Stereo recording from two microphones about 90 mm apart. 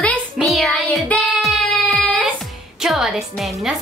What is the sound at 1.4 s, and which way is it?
Music, centre (ahead or behind).